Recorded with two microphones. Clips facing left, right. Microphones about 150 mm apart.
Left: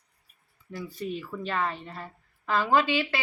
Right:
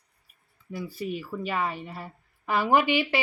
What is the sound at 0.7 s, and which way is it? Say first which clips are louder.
Speech: right 1 dB; 10° right (ahead or behind).